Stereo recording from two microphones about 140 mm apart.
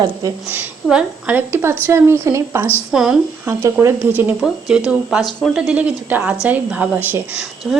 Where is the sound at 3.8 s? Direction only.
15° right (ahead or behind).